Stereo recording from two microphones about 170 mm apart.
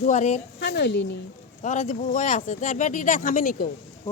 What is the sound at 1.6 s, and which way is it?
Speech, 45° left (ahead or behind).